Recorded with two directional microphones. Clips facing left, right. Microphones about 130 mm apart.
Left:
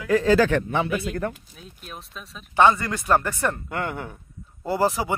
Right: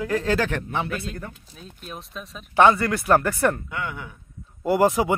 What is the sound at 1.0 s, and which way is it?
Speech, 85° left.